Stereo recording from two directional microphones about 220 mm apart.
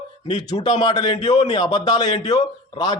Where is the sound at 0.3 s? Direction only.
20° left (ahead or behind).